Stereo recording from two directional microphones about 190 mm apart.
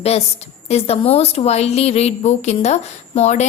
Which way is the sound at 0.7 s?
30° left (ahead or behind).